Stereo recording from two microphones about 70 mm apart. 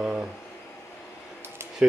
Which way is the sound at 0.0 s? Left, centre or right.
Centre.